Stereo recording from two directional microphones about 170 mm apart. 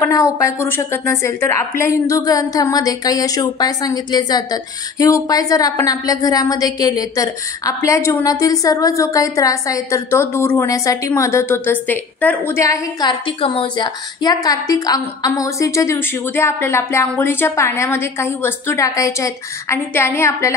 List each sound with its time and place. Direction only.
0.0 s a woman's voice: 15° left (ahead or behind)
13.4 s a woman's voice: 30° left (ahead or behind)